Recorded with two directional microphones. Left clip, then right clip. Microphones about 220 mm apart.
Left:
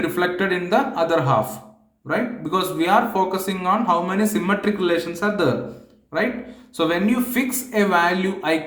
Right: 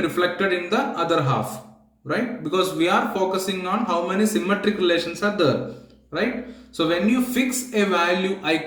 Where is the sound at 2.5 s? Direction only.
35° left (ahead or behind).